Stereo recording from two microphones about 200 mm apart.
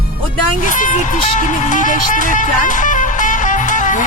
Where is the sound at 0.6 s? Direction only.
40° left (ahead or behind).